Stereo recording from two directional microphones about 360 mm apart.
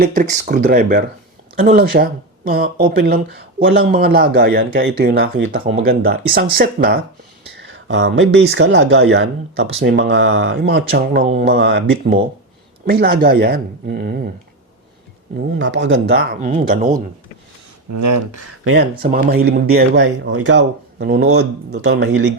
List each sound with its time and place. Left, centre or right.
0.0 s speech: right
15.5 s speech: right
17.9 s speech: right
18.6 s speech: right